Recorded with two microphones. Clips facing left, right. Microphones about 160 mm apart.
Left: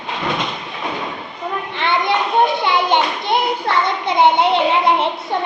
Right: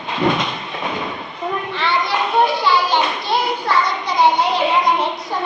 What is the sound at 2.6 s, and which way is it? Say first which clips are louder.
Child singing: left 1 dB; 20° left (ahead or behind).